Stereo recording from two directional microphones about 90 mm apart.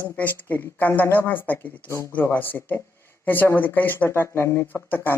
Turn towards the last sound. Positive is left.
turn(degrees=20)  # may be behind; listen again after turning